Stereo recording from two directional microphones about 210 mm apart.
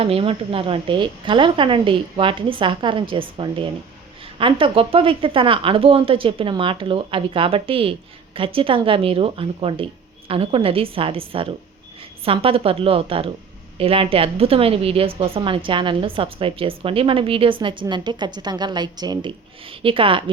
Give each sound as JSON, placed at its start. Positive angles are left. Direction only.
{"t": 0.0, "sound": "a woman's voice", "side_deg": -25}